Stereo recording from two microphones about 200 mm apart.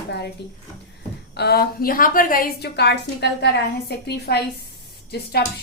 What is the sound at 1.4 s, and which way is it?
A woman's voice, 50° left (ahead or behind).